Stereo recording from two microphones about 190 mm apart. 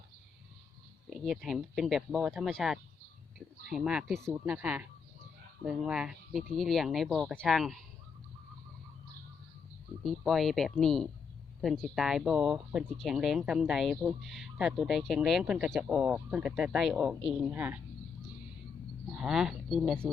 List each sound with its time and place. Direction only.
1.1 s speech: centre (ahead or behind)
10.0 s speech: centre (ahead or behind)
19.0 s speech: 5° right (ahead or behind)